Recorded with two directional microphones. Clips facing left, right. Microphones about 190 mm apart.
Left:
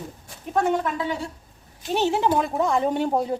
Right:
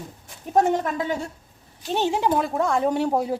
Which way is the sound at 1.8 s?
15° right (ahead or behind).